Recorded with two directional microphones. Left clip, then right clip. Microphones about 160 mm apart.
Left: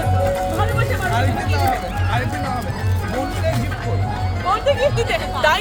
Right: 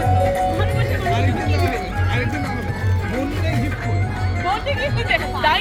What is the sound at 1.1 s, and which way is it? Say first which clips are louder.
Music: left 1 dB; 40° left (ahead or behind).